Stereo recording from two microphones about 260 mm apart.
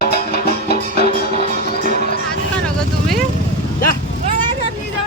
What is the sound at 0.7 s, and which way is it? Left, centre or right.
Music, right.